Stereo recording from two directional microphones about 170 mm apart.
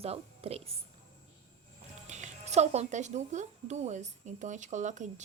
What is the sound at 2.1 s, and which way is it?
Speech, 40° right (ahead or behind).